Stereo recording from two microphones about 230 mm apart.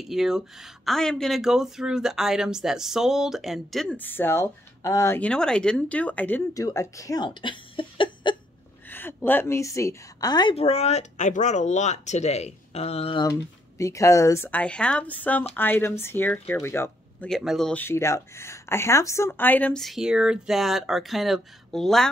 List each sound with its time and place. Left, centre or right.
0.0 s speech: centre; by 8.4 s left
8.8 s a woman's voice: centre